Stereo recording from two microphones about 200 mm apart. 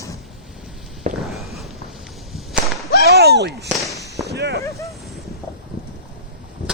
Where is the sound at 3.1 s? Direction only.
55° right (ahead or behind).